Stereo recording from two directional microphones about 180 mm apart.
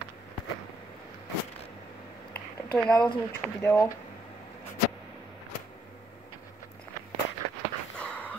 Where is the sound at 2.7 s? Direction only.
5° left (ahead or behind).